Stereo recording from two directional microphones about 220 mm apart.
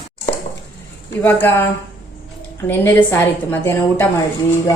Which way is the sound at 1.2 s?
10° left (ahead or behind).